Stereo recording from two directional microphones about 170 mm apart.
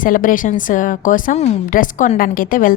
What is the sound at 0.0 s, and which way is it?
A woman's voice, 55° left (ahead or behind).